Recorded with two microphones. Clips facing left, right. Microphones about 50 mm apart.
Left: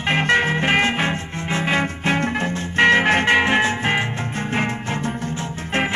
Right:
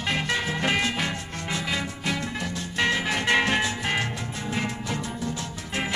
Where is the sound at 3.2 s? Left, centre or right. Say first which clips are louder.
Left 6 dB; left.